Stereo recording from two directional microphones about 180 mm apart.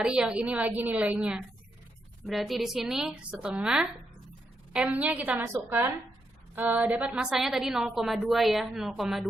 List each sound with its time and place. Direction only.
0.0 s a woman's voice: 5° right (ahead or behind)